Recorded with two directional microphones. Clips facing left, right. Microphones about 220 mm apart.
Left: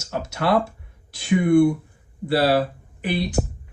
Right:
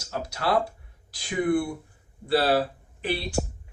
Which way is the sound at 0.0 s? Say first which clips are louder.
Left 5 dB; 25° left (ahead or behind).